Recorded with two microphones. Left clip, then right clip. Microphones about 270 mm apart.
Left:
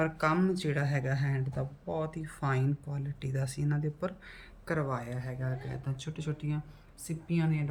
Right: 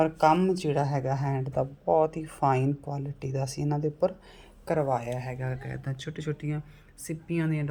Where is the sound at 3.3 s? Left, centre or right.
Right.